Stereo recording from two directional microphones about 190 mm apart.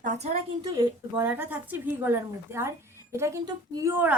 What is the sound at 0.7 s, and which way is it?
A woman's voice, 10° right (ahead or behind).